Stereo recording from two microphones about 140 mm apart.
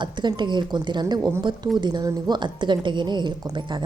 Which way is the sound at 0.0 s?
35° right (ahead or behind).